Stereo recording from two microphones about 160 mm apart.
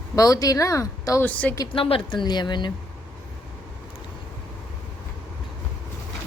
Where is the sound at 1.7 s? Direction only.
35° left (ahead or behind).